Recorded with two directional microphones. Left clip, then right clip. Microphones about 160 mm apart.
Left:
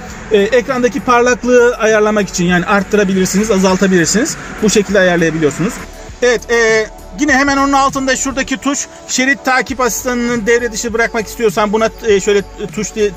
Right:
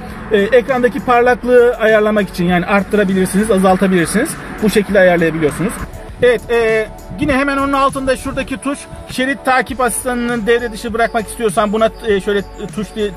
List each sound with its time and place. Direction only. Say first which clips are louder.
0.3 s a man's voice: even; 55° left (ahead or behind); by 13.1 s 40° left (ahead or behind)